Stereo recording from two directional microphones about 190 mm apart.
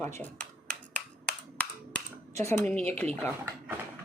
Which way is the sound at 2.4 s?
10° left (ahead or behind).